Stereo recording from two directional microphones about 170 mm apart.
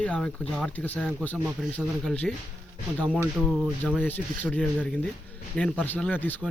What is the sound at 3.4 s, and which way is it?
Speech, 5° left (ahead or behind).